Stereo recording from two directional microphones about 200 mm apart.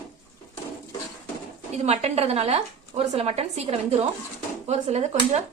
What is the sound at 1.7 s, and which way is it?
Speech, 35° right (ahead or behind).